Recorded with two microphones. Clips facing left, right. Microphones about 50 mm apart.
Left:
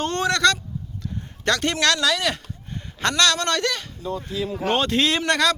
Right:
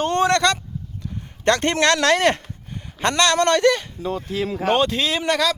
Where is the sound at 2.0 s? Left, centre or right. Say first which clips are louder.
Right 5 dB; right.